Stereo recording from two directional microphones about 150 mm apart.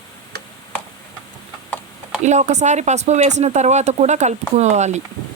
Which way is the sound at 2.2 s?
50° right (ahead or behind).